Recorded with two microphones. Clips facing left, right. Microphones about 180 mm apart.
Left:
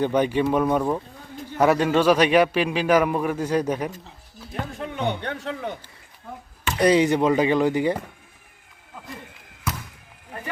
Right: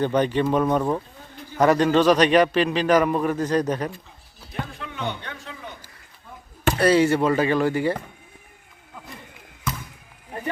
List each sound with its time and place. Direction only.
0.0 s a man's voice: 10° left (ahead or behind)
4.8 s a sound: 55° left (ahead or behind)
6.7 s a man's voice: 15° left (ahead or behind)